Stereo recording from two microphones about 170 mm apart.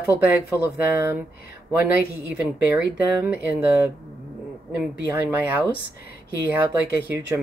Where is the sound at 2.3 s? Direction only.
10° right (ahead or behind).